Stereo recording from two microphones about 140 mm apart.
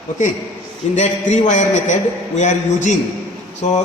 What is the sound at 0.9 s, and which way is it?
A man's voice, 55° left (ahead or behind).